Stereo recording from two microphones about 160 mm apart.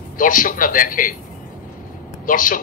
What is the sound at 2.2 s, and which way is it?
Speech, 60° left (ahead or behind).